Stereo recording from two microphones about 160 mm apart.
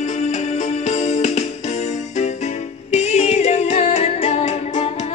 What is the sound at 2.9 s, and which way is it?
Music, 40° left (ahead or behind).